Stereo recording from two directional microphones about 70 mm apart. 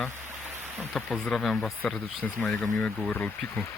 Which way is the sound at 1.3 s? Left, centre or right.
Centre.